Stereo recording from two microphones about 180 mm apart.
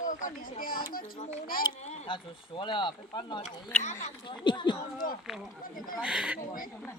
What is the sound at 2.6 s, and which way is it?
Speech, 25° left (ahead or behind).